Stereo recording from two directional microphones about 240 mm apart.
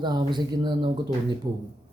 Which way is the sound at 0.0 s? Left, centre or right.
Centre.